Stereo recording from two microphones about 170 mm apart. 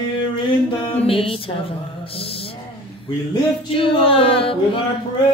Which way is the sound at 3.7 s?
30° left (ahead or behind).